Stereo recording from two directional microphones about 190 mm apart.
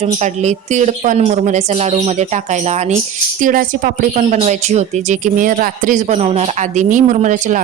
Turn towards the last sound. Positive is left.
turn(degrees=-40)  # may be behind; listen again after turning